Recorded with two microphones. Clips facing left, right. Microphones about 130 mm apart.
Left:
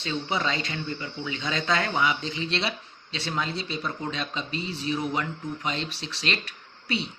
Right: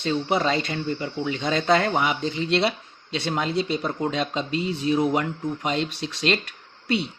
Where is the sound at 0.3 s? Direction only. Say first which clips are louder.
Right 5 dB; 35° right (ahead or behind); by 6.2 s 50° right (ahead or behind).